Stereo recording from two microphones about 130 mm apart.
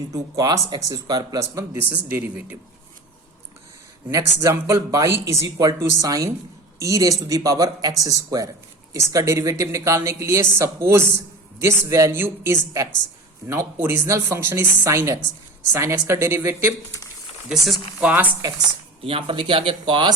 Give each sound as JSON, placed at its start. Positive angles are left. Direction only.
{"t": 0.1, "sound": "speech", "side_deg": -25}
{"t": 4.1, "sound": "speech", "side_deg": -25}
{"t": 17.5, "sound": "speech", "side_deg": -5}
{"t": 19.0, "sound": "speech", "side_deg": -45}